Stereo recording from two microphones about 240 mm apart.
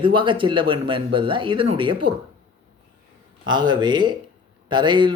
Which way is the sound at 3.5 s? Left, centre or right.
Centre.